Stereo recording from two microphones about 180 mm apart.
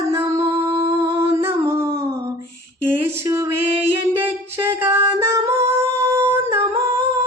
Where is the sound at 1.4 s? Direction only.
15° right (ahead or behind).